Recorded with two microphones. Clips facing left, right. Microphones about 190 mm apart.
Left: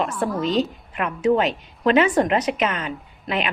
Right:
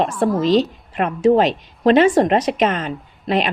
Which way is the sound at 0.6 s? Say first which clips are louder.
Right 3 dB; 35° right (ahead or behind).